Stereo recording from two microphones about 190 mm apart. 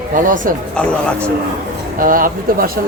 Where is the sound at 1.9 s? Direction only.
45° right (ahead or behind).